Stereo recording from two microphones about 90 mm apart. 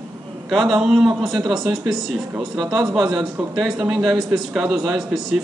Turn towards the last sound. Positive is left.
turn(degrees=-5)  # may be behind; listen again after turning